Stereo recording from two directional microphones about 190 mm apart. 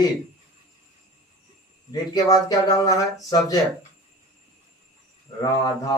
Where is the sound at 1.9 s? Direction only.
20° left (ahead or behind).